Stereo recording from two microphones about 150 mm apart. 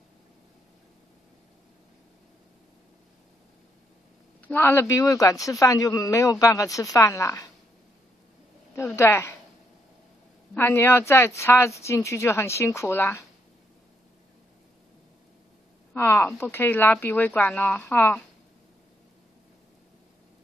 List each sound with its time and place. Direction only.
4.4 s speech: 10° left (ahead or behind)
8.7 s speech: 20° left (ahead or behind)
10.5 s speech: 15° left (ahead or behind)
15.9 s speech: 15° left (ahead or behind)